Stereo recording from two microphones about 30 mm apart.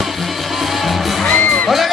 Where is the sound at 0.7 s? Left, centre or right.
Centre.